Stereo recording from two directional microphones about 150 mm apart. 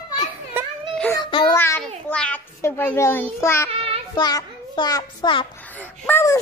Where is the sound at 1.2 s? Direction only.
30° left (ahead or behind).